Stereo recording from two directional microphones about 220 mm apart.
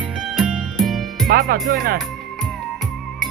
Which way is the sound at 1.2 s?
40° right (ahead or behind).